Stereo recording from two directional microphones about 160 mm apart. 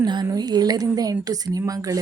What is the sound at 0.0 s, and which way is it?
A woman's voice, 25° right (ahead or behind).